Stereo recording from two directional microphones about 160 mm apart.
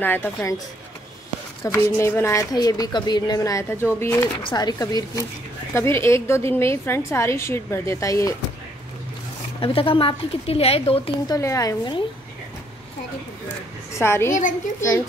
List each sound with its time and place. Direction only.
0.0 s a woman's voice: 10° left (ahead or behind)
1.6 s a woman's voice: 15° left (ahead or behind)
4.4 s a woman's voice: 30° left (ahead or behind)
9.6 s a woman's voice: 35° left (ahead or behind)
11.2 s a woman's voice: 20° left (ahead or behind)
13.9 s a woman's voice: 15° left (ahead or behind)